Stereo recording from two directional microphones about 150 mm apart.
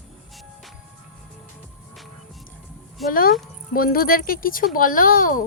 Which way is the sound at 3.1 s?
70° left (ahead or behind).